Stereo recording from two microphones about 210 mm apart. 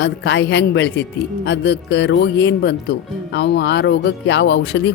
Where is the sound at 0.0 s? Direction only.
55° left (ahead or behind).